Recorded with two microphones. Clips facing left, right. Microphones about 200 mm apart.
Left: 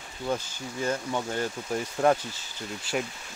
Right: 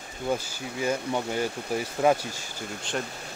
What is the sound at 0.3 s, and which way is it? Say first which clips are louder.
Speech: right 2 dB; 10° right (ahead or behind).